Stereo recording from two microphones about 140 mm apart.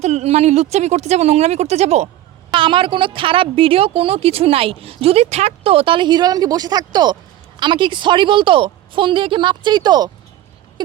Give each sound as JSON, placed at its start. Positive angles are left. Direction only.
{"t": 0.0, "sound": "speech", "side_deg": -50}
{"t": 2.5, "sound": "a woman's voice", "side_deg": -35}